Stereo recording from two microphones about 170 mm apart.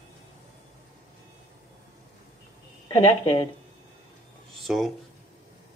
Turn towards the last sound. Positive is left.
turn(degrees=0)  # may be behind; listen again after turning